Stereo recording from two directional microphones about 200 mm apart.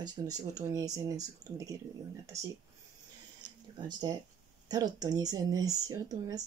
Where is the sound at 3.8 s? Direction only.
20° right (ahead or behind).